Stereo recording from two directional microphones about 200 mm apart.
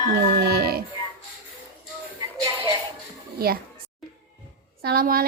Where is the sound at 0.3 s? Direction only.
55° right (ahead or behind).